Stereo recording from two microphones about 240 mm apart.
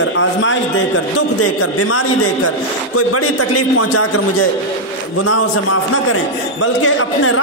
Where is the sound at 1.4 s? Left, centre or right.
Left.